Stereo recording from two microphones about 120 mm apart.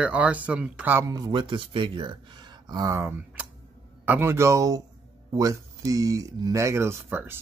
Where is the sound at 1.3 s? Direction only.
40° right (ahead or behind).